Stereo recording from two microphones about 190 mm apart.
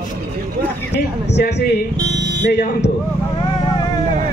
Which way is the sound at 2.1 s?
65° right (ahead or behind).